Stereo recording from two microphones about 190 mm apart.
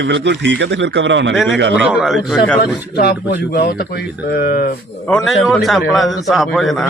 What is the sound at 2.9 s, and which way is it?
Speech, 55° left (ahead or behind).